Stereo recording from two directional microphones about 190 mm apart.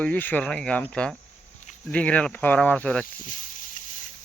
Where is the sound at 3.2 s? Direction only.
45° left (ahead or behind).